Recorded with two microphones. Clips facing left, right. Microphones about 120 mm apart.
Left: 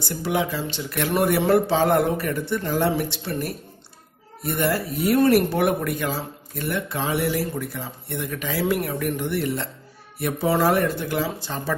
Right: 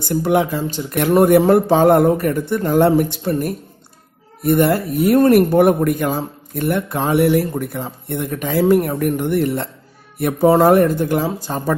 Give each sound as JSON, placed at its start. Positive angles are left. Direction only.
{"t": 0.0, "sound": "speech", "side_deg": -50}